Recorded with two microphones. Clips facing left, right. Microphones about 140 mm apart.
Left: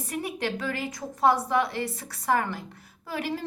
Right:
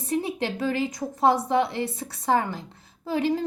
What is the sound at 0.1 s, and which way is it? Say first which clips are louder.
A woman's voice: right 4 dB; 25° right (ahead or behind).